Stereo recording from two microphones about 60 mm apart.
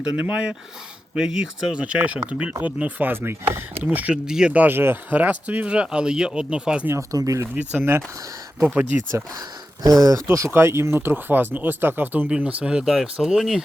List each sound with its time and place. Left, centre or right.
0.2 s speech: centre
3.1 s speech: right
4.3 s speech: centre
4.5 s speech: right
5.1 s speech: right
7.1 s speech: right
7.4 s speech: right
8.8 s speech: right
9.8 s speech: right
10.2 s speech: right
11.1 s speech: right
12.4 s speech: right